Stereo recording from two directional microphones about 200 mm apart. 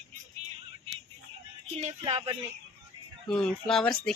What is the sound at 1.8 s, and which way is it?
Speech, 30° right (ahead or behind).